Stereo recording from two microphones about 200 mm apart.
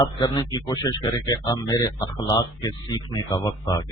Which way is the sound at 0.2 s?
20° left (ahead or behind).